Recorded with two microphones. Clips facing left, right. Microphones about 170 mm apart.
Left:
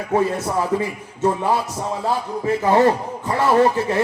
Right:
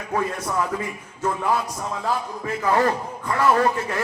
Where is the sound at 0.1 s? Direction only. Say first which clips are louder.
Left 5 dB; 30° left (ahead or behind).